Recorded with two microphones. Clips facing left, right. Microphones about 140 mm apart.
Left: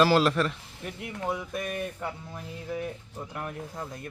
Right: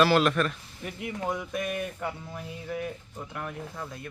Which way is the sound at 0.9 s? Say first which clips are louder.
Right 1 dB; centre (ahead or behind).